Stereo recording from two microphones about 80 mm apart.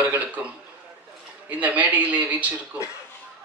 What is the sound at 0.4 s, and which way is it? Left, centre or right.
Speech, centre.